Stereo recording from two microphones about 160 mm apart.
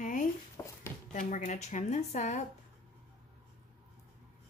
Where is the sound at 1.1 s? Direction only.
50° left (ahead or behind).